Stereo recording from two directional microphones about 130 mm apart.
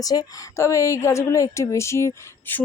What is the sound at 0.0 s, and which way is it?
Speech, 30° left (ahead or behind).